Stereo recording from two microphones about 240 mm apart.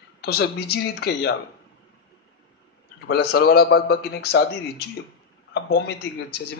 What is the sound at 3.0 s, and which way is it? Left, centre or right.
A man's voice, left.